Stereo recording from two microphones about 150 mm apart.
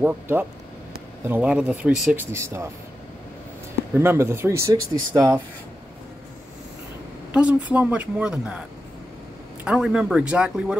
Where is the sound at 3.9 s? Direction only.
15° right (ahead or behind).